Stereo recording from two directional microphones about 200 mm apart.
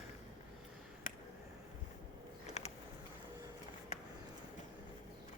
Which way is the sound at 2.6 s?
35° left (ahead or behind).